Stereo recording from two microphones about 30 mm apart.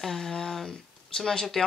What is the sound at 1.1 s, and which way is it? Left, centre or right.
Speech, left.